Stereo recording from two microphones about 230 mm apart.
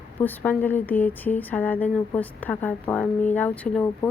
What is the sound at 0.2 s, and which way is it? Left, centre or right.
A woman's voice, centre.